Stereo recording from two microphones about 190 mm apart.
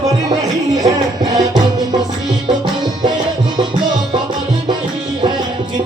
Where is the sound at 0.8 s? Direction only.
20° right (ahead or behind).